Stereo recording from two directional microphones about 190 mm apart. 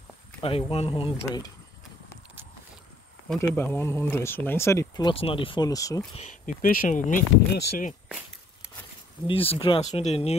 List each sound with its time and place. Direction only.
0.4 s speech: 30° left (ahead or behind)
3.6 s speech: 10° left (ahead or behind)
6.1 s speech: 40° left (ahead or behind)
9.3 s speech: 30° left (ahead or behind)